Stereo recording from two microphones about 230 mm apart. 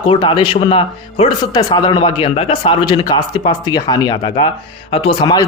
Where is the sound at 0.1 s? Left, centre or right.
Left.